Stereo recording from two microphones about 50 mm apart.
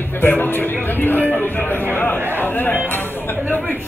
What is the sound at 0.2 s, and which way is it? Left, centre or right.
A man's voice, left.